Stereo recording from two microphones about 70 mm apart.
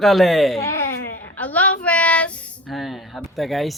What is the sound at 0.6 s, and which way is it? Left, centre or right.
Baby cry, left.